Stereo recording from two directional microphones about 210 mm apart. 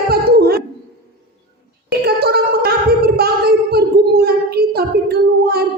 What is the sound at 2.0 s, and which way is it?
Gargling, 50° right (ahead or behind).